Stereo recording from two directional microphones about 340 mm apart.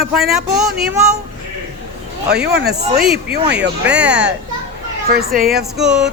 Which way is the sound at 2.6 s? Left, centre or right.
Right.